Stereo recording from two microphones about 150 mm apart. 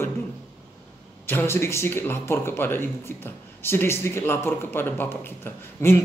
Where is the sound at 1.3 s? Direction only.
15° left (ahead or behind).